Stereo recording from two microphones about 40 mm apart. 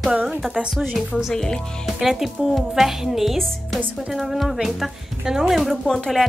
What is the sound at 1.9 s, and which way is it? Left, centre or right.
A woman's voice, centre.